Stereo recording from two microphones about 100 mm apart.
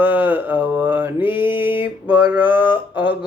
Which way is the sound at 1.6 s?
20° right (ahead or behind).